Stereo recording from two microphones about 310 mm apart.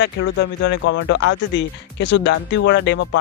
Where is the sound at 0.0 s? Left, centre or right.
Left.